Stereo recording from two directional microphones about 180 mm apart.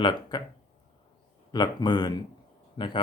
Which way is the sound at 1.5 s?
25° left (ahead or behind).